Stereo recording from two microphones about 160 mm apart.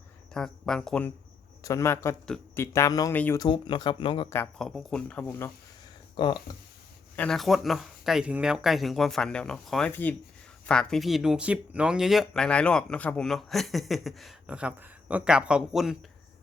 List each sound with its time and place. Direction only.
0.3 s speech: 5° left (ahead or behind)
1.6 s a man's voice: 20° left (ahead or behind)
4.5 s speech: centre (ahead or behind)
6.1 s speech: 30° left (ahead or behind)
7.2 s a man's voice: centre (ahead or behind)